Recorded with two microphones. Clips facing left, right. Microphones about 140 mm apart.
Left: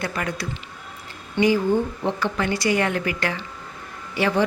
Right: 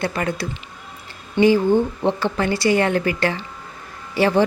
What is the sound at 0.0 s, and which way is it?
A woman's voice, 30° right (ahead or behind).